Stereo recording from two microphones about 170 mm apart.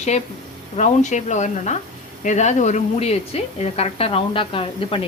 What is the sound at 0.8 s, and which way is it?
A woman's voice, 45° left (ahead or behind).